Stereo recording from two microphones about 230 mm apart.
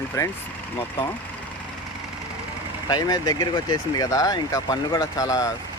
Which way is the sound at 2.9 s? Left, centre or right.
Centre.